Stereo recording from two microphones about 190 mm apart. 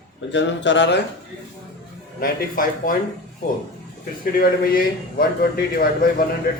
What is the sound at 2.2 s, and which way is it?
Speech, 50° left (ahead or behind).